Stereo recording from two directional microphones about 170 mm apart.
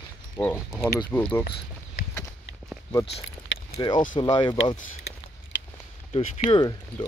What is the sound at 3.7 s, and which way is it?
Speech, 25° left (ahead or behind).